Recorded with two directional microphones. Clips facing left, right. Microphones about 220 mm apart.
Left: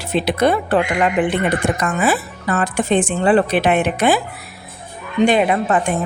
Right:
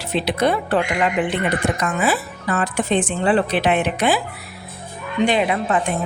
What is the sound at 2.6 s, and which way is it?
A woman's voice, 50° left (ahead or behind).